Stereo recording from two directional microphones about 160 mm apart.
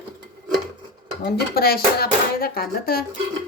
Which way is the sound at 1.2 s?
75° left (ahead or behind).